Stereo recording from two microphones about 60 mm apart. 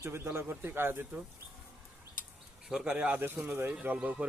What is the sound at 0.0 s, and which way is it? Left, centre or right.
Speech, right.